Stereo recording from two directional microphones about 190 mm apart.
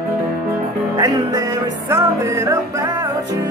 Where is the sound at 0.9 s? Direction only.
15° right (ahead or behind).